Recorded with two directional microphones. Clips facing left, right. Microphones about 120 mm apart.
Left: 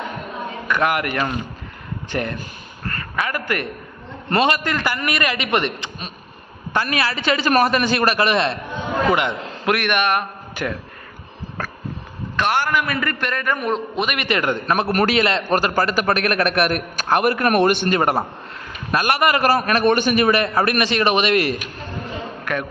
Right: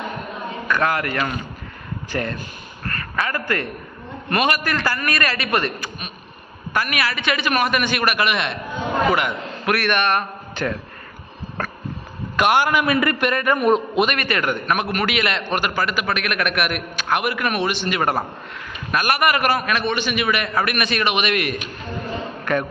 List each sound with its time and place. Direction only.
0.7 s a man's voice: 15° left (ahead or behind)
12.4 s a man's voice: 15° right (ahead or behind)
14.2 s a man's voice: 25° left (ahead or behind); by 18.0 s 45° left (ahead or behind)
18.9 s a man's voice: 25° left (ahead or behind)
22.5 s a man's voice: 5° left (ahead or behind)